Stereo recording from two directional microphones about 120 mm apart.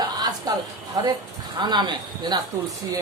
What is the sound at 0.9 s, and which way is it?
A man's voice, 30° right (ahead or behind).